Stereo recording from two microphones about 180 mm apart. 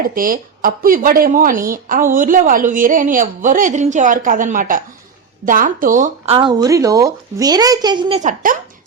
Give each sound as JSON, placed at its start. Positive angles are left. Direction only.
{"t": 0.1, "sound": "speech", "side_deg": -50}
{"t": 6.2, "sound": "speech", "side_deg": -30}
{"t": 6.5, "sound": "speech", "side_deg": -20}
{"t": 8.2, "sound": "speech", "side_deg": -45}